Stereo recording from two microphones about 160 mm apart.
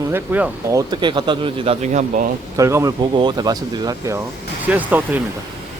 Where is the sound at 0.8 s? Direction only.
25° right (ahead or behind); by 2.3 s 50° right (ahead or behind).